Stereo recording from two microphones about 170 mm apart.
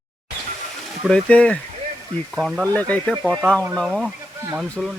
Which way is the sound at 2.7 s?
10° left (ahead or behind).